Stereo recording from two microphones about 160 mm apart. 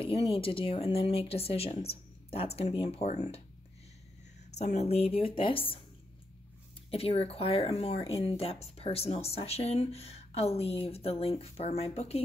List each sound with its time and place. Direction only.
0.0 s speech: 35° left (ahead or behind)
4.5 s speech: 45° left (ahead or behind)
6.9 s speech: 35° left (ahead or behind)